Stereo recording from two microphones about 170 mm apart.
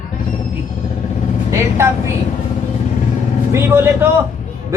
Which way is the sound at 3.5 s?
15° right (ahead or behind).